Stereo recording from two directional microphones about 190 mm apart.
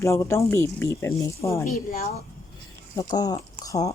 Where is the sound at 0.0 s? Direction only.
15° left (ahead or behind).